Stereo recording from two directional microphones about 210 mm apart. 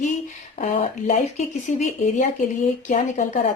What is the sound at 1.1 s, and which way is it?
Speech, 35° left (ahead or behind).